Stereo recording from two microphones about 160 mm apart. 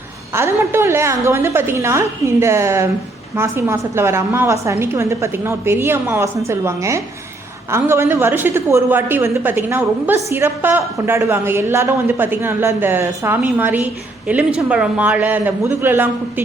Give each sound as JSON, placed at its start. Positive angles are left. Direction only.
{"t": 0.3, "sound": "a woman's voice", "side_deg": -15}